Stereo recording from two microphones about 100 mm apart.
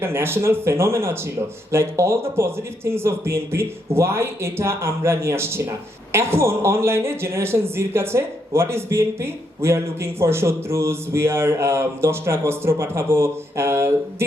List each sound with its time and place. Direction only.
0.0 s speech: 25° right (ahead or behind)